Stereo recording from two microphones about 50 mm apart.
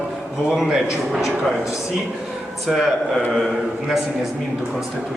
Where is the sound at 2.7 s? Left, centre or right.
Centre.